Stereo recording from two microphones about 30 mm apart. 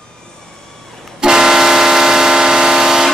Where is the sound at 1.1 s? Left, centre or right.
Right.